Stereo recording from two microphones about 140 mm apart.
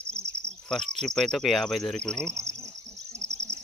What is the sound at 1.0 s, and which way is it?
Cricket, 5° left (ahead or behind).